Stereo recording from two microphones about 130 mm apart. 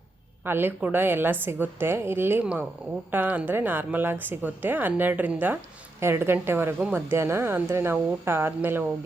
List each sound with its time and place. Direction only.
0.4 s a woman's voice: 15° right (ahead or behind)